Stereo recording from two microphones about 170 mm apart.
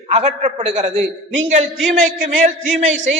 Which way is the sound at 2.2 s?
45° right (ahead or behind).